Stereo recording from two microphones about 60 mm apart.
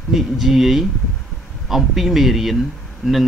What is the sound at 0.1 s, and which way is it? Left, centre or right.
Speech, centre.